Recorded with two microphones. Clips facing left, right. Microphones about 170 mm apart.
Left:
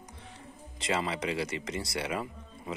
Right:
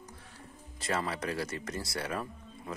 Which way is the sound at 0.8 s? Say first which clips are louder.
Left 2 dB; centre (ahead or behind).